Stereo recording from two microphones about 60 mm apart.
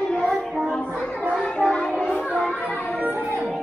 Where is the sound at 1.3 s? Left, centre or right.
Centre.